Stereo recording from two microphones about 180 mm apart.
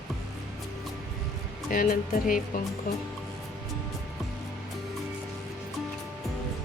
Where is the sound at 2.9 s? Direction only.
55° left (ahead or behind).